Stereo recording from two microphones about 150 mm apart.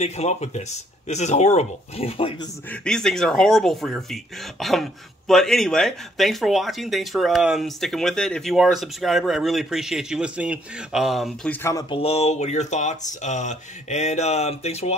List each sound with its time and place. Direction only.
0.0 s speech: 45° left (ahead or behind)
2.7 s speech: 5° left (ahead or behind)
11.9 s speech: 40° left (ahead or behind)